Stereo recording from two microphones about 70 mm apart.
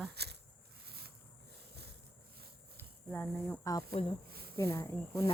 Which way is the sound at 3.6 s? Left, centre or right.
Left.